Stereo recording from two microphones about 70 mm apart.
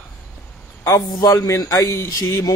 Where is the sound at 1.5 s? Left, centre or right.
Left.